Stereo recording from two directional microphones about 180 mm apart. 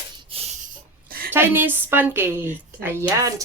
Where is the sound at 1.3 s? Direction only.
10° right (ahead or behind).